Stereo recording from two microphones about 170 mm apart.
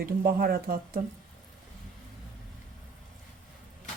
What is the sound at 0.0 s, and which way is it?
Speech, 60° right (ahead or behind).